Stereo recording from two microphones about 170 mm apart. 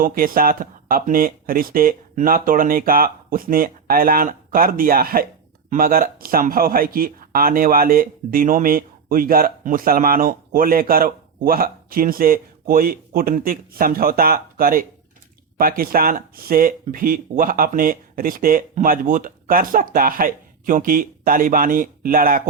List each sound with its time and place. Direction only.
0.0 s speech: 55° right (ahead or behind)